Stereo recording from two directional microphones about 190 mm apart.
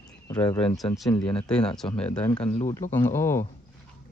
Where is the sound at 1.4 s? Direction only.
5° left (ahead or behind).